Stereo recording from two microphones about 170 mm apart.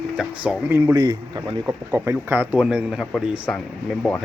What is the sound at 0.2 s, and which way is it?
Speech, 10° right (ahead or behind).